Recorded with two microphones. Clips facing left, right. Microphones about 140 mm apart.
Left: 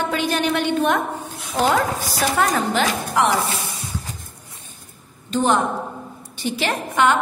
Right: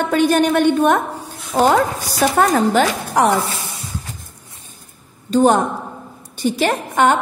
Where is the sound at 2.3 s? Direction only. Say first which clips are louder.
Right 6 dB; 45° right (ahead or behind).